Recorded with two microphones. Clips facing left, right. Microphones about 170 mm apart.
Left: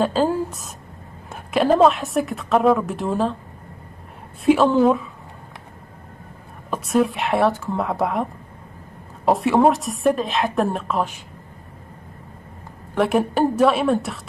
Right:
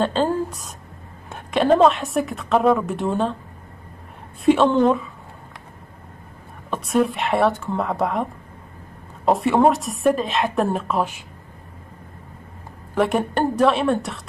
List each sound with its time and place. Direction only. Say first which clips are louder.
0.0 s a woman's voice: left 1 dB; 5° left (ahead or behind)
4.5 s a woman's voice: even; 5° left (ahead or behind)
6.7 s a woman's voice: left 1 dB; centre (ahead or behind)
12.9 s a woman's voice: left 1 dB; centre (ahead or behind)